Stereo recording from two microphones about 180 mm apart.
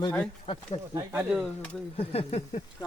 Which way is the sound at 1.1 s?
Centre (ahead or behind).